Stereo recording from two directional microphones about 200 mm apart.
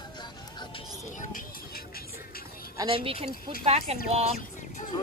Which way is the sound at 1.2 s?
45° left (ahead or behind).